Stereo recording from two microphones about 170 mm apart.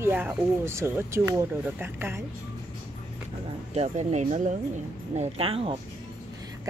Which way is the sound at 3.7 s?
40° right (ahead or behind).